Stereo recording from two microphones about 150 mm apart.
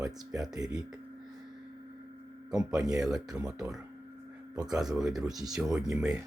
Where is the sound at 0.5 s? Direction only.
25° right (ahead or behind).